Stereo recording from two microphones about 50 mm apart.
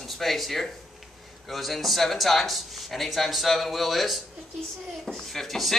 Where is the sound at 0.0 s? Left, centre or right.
Centre.